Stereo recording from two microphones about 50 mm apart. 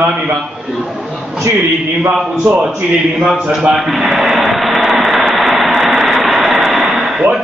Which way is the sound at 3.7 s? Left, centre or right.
Centre.